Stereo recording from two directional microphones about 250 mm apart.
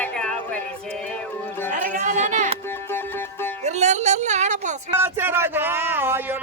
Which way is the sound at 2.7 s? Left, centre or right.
Centre.